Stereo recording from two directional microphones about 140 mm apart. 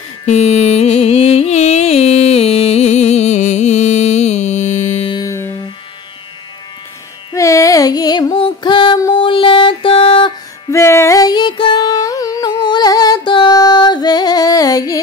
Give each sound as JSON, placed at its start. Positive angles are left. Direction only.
{"t": 0.3, "sound": "music", "side_deg": 50}
{"t": 5.1, "sound": "music", "side_deg": 25}
{"t": 7.3, "sound": "music", "side_deg": 20}
{"t": 10.7, "sound": "music", "side_deg": 20}